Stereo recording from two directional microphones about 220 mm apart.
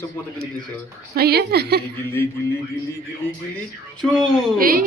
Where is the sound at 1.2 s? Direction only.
45° right (ahead or behind).